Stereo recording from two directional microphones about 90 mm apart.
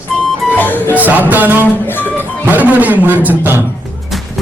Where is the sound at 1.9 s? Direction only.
20° left (ahead or behind).